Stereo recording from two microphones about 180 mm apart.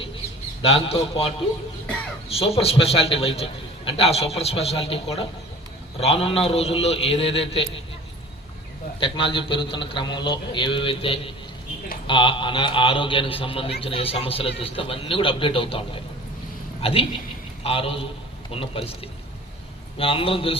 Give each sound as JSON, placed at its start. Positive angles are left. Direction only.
{"t": 0.6, "sound": "a man's voice", "side_deg": 30}
{"t": 2.3, "sound": "a man's voice", "side_deg": 35}
{"t": 9.0, "sound": "a man's voice", "side_deg": 30}
{"t": 20.0, "sound": "a man's voice", "side_deg": 30}